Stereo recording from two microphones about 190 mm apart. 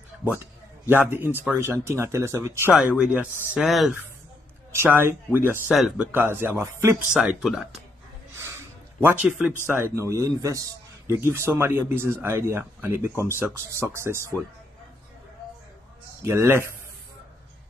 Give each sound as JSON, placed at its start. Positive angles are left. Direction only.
{"t": 0.2, "sound": "a sound", "side_deg": -10}
{"t": 1.1, "sound": "speech", "side_deg": -10}
{"t": 2.7, "sound": "speech", "side_deg": -5}
{"t": 4.7, "sound": "speech", "side_deg": -10}
{"t": 9.0, "sound": "speech", "side_deg": -10}
{"t": 16.3, "sound": "speech", "side_deg": -15}